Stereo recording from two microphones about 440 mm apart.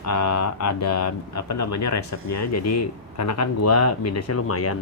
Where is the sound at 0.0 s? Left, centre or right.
Left.